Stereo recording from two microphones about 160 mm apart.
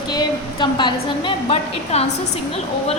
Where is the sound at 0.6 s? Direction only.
30° left (ahead or behind).